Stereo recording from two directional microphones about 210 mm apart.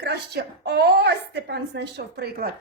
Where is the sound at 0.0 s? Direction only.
50° right (ahead or behind).